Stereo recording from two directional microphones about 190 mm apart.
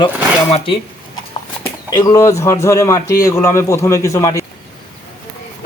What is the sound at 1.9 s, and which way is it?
A man's voice, 20° left (ahead or behind).